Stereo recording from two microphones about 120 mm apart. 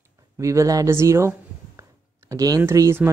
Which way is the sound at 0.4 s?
25° right (ahead or behind).